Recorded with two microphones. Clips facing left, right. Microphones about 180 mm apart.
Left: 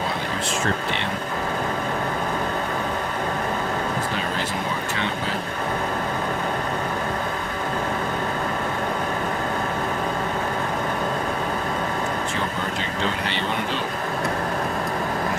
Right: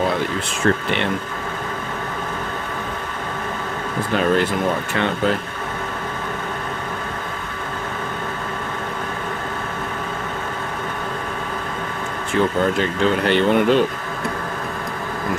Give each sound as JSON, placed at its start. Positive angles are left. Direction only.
{"t": 13.2, "sound": "speech", "side_deg": -55}